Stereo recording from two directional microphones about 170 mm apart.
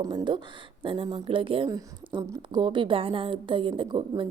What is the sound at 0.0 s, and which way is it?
A woman's voice, 25° right (ahead or behind).